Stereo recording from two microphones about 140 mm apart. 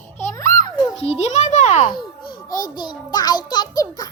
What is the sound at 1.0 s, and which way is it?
Speech, 50° left (ahead or behind).